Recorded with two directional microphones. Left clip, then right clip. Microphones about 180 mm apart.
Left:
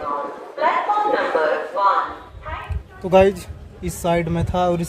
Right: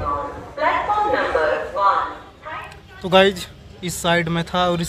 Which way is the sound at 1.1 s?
35° right (ahead or behind).